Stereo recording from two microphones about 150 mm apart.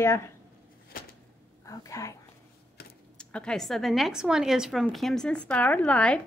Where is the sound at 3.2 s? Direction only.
5° left (ahead or behind).